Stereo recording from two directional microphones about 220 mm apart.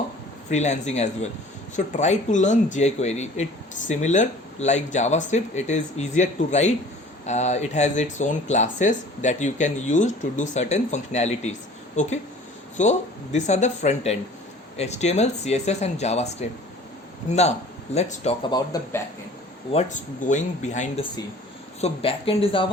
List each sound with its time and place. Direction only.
0.5 s speech: 30° left (ahead or behind); by 19.0 s 15° left (ahead or behind)
19.7 s speech: 35° left (ahead or behind)